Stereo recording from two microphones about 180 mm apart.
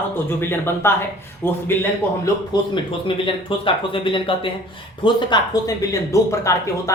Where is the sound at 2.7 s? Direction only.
30° left (ahead or behind).